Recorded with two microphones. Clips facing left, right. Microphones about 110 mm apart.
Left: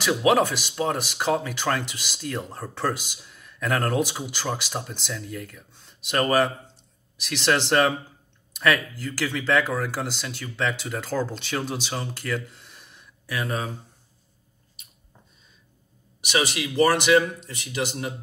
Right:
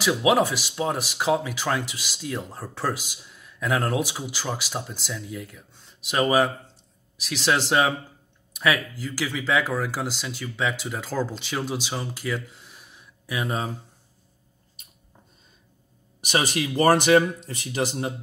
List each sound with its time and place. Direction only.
0.0 s speech: 5° right (ahead or behind)
12.5 s a sound: 10° right (ahead or behind)
16.2 s speech: 45° right (ahead or behind)